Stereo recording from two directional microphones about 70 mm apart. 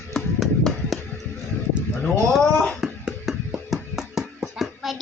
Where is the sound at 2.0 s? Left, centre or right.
Centre.